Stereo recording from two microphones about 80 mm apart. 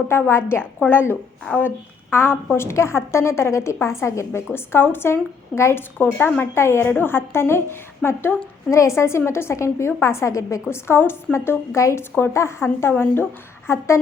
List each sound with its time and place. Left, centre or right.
0.1 s a woman's voice: left
6.4 s a woman's voice: left